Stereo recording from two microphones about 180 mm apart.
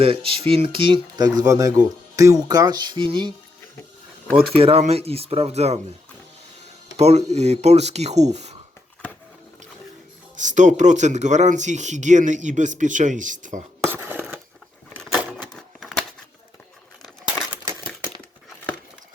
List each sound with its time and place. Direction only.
0.0 s speech: 30° right (ahead or behind)
4.5 s speech: 30° right (ahead or behind)
6.9 s speech: 35° right (ahead or behind)
10.3 s speech: 45° right (ahead or behind)
13.9 s crushing: 10° right (ahead or behind)
14.8 s a sound: 5° left (ahead or behind)